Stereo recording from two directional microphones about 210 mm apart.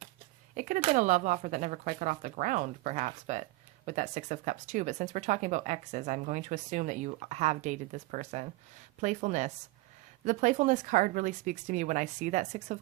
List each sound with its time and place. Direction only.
0.5 s speech: 35° right (ahead or behind)